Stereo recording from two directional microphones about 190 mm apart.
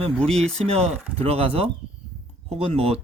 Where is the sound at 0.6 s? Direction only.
30° right (ahead or behind).